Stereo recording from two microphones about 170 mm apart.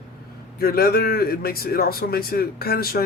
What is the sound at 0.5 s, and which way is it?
Speech, 60° left (ahead or behind).